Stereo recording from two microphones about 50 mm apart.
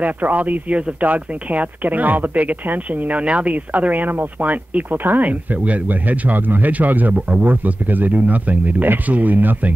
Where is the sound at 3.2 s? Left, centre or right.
Right.